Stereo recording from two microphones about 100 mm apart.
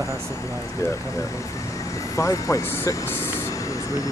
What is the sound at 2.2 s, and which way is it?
Speech, 30° left (ahead or behind).